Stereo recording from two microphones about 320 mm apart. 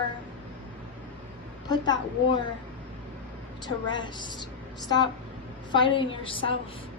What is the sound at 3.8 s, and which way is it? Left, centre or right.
Speech, centre.